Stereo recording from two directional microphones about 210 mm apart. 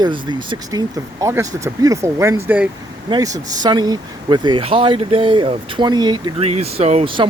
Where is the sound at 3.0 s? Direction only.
20° right (ahead or behind).